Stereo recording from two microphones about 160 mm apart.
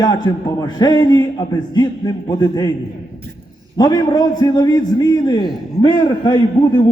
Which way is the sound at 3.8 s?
25° left (ahead or behind).